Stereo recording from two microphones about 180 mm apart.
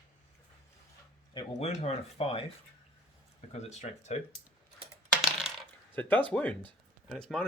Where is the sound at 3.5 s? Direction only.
40° left (ahead or behind).